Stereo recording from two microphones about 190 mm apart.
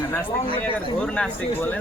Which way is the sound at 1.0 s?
5° left (ahead or behind).